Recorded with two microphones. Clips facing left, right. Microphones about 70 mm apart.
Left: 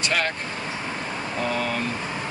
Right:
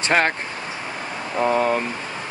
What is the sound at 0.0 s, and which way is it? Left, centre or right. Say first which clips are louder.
Speech: right 6 dB; right.